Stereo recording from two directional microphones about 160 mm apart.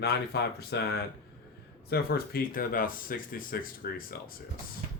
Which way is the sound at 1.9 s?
75° left (ahead or behind).